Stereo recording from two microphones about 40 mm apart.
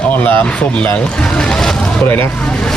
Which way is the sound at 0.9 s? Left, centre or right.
Left.